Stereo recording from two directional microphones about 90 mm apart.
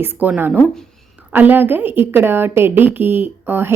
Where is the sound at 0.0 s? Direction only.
20° right (ahead or behind).